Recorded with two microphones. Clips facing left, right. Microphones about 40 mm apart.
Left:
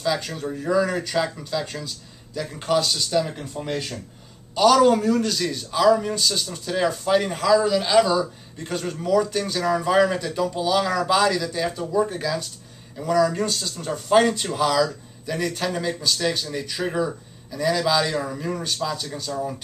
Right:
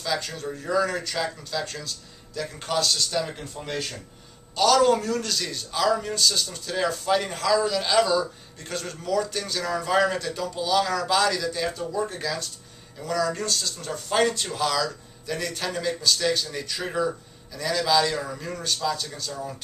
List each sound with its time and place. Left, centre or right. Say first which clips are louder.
0.0 s speech: left 4 dB; centre